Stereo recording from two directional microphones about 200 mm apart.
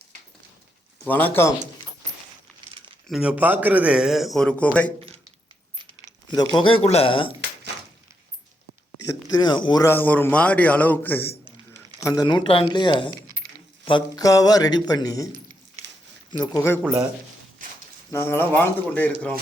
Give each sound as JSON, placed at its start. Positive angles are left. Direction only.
{"t": 1.0, "sound": "speech", "side_deg": 10}
{"t": 3.1, "sound": "a man's voice", "side_deg": -5}
{"t": 4.9, "sound": "a sound", "side_deg": -30}
{"t": 6.3, "sound": "a man's voice", "side_deg": 20}
{"t": 9.0, "sound": "a man's voice", "side_deg": 20}
{"t": 16.3, "sound": "a man's voice", "side_deg": 20}
{"t": 17.6, "sound": "walk", "side_deg": -40}
{"t": 18.1, "sound": "speech", "side_deg": 10}